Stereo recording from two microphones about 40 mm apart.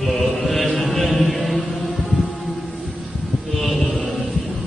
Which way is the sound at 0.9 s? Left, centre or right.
Centre.